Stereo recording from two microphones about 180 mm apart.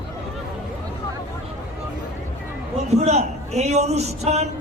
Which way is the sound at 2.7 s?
35° right (ahead or behind).